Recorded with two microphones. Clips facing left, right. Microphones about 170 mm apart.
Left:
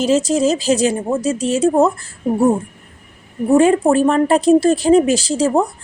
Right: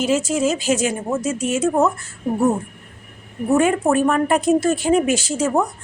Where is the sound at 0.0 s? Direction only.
35° left (ahead or behind).